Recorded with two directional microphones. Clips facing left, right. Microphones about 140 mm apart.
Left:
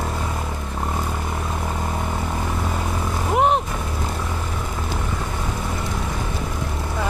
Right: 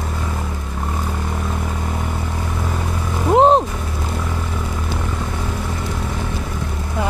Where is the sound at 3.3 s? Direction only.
30° right (ahead or behind).